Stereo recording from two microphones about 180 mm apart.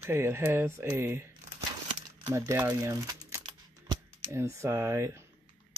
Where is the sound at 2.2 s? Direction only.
15° right (ahead or behind).